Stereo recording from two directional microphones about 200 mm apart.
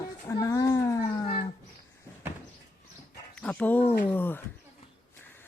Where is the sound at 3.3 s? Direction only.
5° left (ahead or behind).